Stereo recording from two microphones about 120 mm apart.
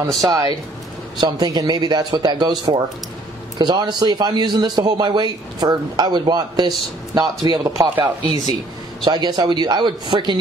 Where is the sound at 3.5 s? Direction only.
35° right (ahead or behind).